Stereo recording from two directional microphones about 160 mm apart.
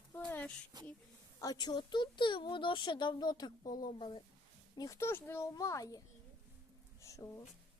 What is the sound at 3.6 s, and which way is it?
Speech, 60° left (ahead or behind).